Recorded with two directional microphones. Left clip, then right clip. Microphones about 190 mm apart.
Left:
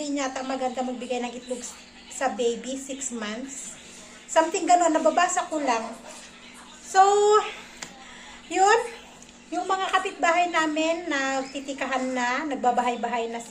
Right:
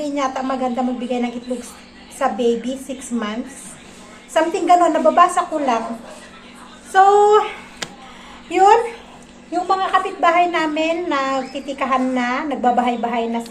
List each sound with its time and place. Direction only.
0.0 s a woman's voice: centre (ahead or behind)
4.4 s a woman's voice: 5° left (ahead or behind)
6.9 s a woman's voice: centre (ahead or behind)
7.8 s a sound: 55° right (ahead or behind)
8.4 s a woman's voice: centre (ahead or behind)